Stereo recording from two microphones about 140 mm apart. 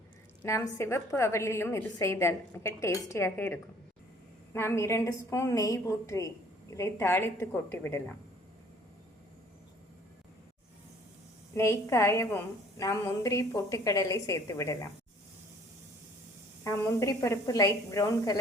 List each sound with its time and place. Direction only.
0.4 s a woman's voice: 20° left (ahead or behind)
11.5 s a woman's voice: 20° left (ahead or behind)
16.6 s a woman's voice: 20° left (ahead or behind)